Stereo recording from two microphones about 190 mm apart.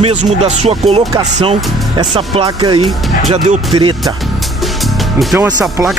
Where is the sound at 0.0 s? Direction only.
35° right (ahead or behind).